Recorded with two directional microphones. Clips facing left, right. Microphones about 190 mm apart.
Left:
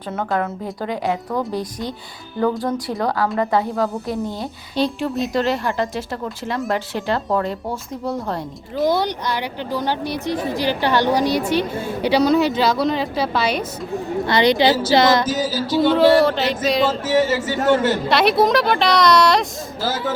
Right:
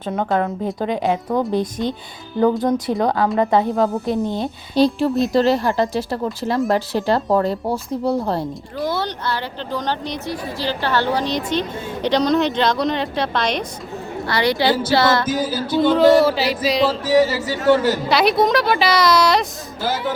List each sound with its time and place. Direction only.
0.1 s a woman's voice: 20° right (ahead or behind)
4.7 s speech: 35° right (ahead or behind)
8.8 s a woman's voice: 15° left (ahead or behind)
14.3 s a woman's voice: 20° left (ahead or behind)
15.3 s music: 55° right (ahead or behind)
15.8 s a woman's voice: centre (ahead or behind)
17.1 s speech: 35° right (ahead or behind)
18.1 s a woman's voice: centre (ahead or behind)